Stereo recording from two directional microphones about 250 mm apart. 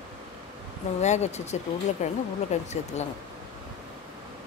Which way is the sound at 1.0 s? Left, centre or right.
Left.